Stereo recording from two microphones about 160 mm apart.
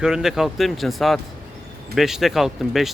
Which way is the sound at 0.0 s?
5° right (ahead or behind).